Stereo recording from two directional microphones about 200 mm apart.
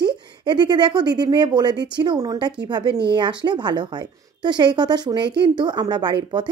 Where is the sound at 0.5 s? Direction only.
20° right (ahead or behind).